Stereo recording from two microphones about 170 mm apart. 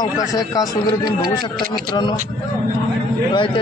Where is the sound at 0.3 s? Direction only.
20° left (ahead or behind).